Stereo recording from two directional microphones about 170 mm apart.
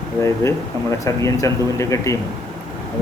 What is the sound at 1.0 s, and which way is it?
Speech, 20° left (ahead or behind).